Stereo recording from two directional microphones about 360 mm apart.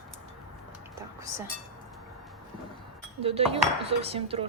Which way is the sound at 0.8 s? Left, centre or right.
Centre.